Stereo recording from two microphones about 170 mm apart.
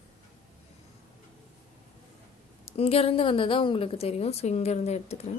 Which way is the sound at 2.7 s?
35° left (ahead or behind).